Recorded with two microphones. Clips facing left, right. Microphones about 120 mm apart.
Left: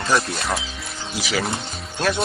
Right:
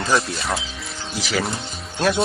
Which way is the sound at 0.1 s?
Centre (ahead or behind).